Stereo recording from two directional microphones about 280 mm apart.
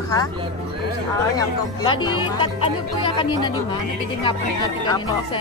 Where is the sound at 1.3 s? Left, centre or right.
Centre.